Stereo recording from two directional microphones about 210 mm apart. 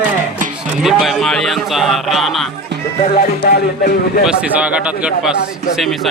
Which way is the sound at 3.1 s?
50° left (ahead or behind).